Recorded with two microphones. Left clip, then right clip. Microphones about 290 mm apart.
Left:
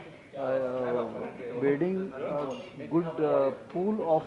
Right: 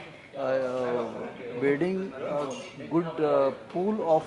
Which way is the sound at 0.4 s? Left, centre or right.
Centre.